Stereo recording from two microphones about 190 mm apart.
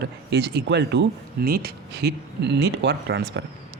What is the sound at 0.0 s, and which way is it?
Speech, 60° right (ahead or behind).